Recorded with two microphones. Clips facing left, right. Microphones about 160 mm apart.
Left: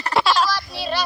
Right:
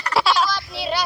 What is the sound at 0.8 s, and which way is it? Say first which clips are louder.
Child singing: right 3 dB; 10° right (ahead or behind).